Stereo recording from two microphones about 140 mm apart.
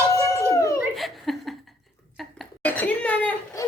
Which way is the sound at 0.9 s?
Centre (ahead or behind).